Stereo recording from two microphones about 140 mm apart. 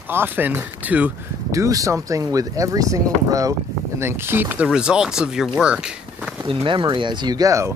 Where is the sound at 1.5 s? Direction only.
25° right (ahead or behind); by 6.3 s 5° right (ahead or behind).